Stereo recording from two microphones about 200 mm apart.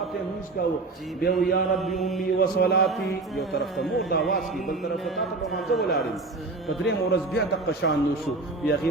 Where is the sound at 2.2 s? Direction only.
50° left (ahead or behind).